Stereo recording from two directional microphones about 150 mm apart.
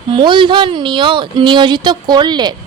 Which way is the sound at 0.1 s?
35° right (ahead or behind).